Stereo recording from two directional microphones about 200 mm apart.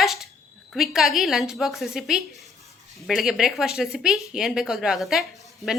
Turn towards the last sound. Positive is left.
turn(degrees=0)  # may be behind; listen again after turning